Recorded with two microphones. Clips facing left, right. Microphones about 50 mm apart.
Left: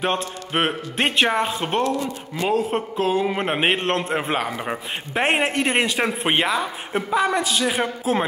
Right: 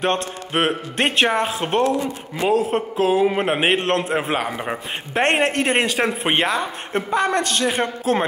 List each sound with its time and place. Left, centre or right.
0.0 s a man's voice: centre
1.9 s a man's voice: centre
2.4 s a man's voice: centre